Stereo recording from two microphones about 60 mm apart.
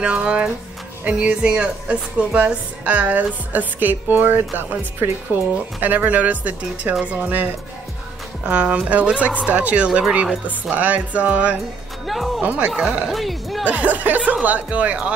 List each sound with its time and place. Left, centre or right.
0.0 s speech: centre
12.1 s speech: centre
12.4 s speech: right
13.1 s speech: centre
13.7 s speech: right